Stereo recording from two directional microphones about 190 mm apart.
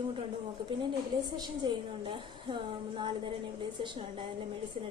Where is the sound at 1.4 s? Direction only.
25° right (ahead or behind).